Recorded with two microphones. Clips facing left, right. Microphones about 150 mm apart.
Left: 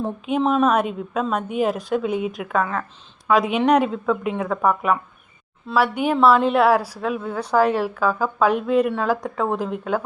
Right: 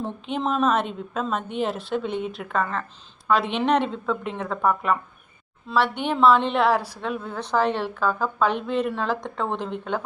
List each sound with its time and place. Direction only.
0.3 s a woman's voice: 5° left (ahead or behind)